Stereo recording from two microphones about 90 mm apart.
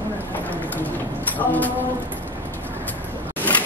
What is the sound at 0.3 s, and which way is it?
Clip-clop, 20° left (ahead or behind).